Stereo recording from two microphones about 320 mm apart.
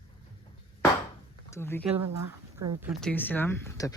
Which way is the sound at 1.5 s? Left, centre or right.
Centre.